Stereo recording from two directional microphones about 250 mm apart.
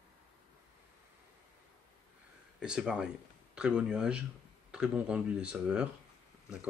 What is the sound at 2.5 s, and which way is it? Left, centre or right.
Speech, centre.